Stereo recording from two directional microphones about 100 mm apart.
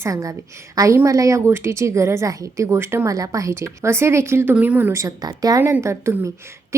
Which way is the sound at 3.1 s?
35° right (ahead or behind).